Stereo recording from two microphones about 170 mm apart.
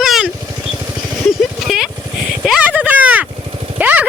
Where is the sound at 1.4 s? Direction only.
Centre (ahead or behind).